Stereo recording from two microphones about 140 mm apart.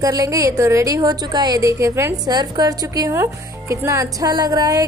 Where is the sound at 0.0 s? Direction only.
25° right (ahead or behind).